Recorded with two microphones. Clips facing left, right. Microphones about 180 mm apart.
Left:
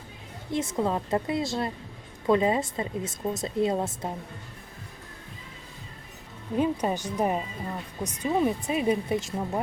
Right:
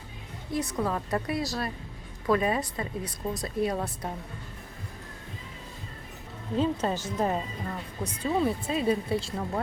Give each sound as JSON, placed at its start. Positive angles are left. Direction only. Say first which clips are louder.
{"t": 0.5, "sound": "a woman's voice", "louder": "left 2 dB", "side_deg": 25}
{"t": 6.6, "sound": "speech", "louder": "left 1 dB", "side_deg": 15}